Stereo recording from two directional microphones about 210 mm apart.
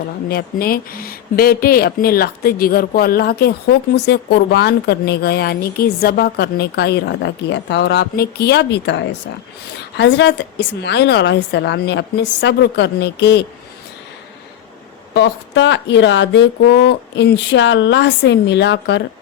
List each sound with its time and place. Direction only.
0.3 s speech: 45° left (ahead or behind)
15.1 s speech: 55° left (ahead or behind)